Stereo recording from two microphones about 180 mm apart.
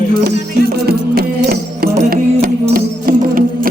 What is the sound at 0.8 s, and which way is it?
Music, 60° right (ahead or behind).